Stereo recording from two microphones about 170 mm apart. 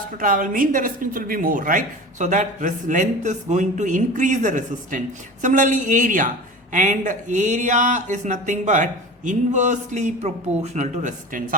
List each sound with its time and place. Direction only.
0.2 s a woman's voice: 55° right (ahead or behind)